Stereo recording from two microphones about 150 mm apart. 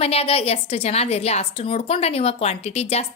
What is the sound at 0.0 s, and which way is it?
A woman's voice, 40° left (ahead or behind).